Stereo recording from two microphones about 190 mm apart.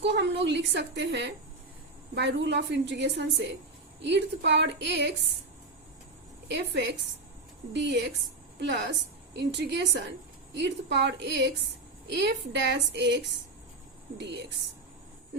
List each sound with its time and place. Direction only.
0.0 s a woman's voice: 65° right (ahead or behind)
6.5 s a woman's voice: 65° right (ahead or behind)